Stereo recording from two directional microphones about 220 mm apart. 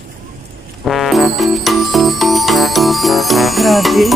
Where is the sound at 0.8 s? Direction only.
Centre (ahead or behind).